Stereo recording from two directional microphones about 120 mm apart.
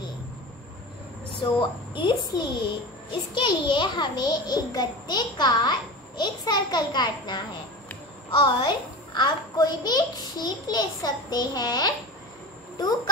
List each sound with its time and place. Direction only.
1.4 s a woman's voice: 40° left (ahead or behind)